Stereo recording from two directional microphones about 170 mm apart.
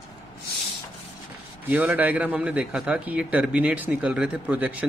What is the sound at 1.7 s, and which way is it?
A man's voice, 10° right (ahead or behind).